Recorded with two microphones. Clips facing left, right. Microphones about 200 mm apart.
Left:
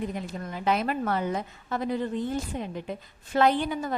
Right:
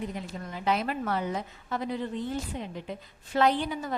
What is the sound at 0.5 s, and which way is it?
A woman's voice, 50° left (ahead or behind).